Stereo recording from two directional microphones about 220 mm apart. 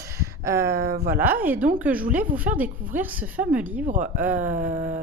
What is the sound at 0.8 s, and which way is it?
Speech, 45° right (ahead or behind).